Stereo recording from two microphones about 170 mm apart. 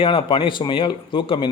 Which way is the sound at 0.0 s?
30° left (ahead or behind).